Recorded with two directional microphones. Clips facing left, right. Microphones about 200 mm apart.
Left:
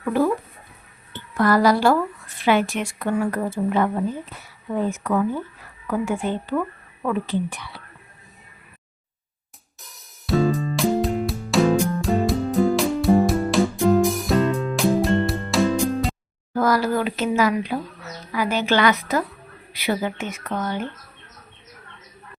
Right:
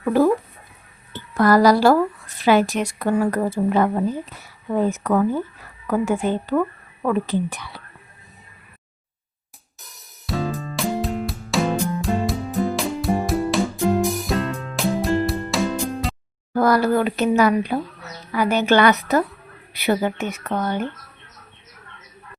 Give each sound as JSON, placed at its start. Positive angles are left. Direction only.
{"t": 0.0, "sound": "a woman's voice", "side_deg": -40}
{"t": 10.2, "sound": "music", "side_deg": 0}
{"t": 16.6, "sound": "a woman's voice", "side_deg": -55}